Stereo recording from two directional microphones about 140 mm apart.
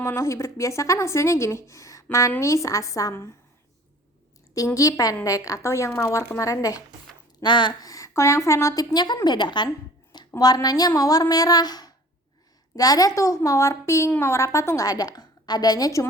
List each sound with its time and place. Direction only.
0.0 s a woman's voice: 20° left (ahead or behind)
4.5 s a woman's voice: 25° left (ahead or behind)